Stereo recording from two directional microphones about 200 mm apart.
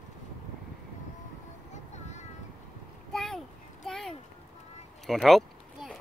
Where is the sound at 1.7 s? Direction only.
35° left (ahead or behind).